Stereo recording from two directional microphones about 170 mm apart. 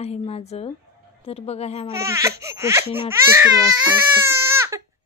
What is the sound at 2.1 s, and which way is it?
Speech, 15° right (ahead or behind).